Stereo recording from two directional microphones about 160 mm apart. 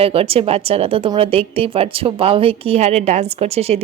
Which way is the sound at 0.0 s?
35° right (ahead or behind).